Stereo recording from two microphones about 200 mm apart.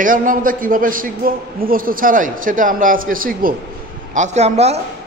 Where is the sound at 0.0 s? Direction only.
40° right (ahead or behind).